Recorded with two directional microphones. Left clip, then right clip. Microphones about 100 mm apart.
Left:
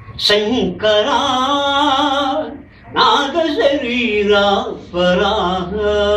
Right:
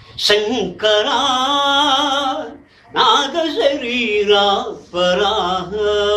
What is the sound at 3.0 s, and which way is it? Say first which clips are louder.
Speech: left 1 dB; 55° right (ahead or behind).